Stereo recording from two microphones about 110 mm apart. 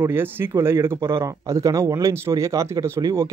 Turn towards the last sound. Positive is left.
turn(degrees=-30)  # may be behind; listen again after turning